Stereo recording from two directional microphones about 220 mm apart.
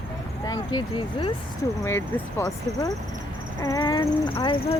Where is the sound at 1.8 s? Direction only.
10° left (ahead or behind).